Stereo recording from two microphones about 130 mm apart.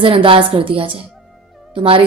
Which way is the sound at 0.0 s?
45° right (ahead or behind).